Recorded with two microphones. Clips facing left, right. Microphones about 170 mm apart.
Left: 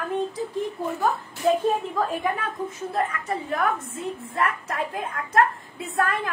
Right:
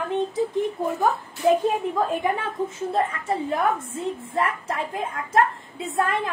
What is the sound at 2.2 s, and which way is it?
A woman's voice, 25° right (ahead or behind).